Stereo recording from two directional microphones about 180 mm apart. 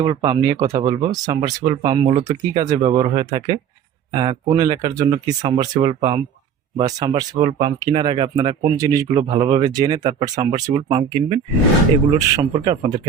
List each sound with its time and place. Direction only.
0.0 s speech: 25° right (ahead or behind)